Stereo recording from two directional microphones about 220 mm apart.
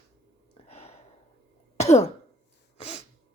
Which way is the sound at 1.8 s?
30° left (ahead or behind).